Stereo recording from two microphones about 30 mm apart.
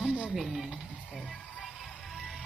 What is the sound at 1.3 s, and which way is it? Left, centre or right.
Music, centre.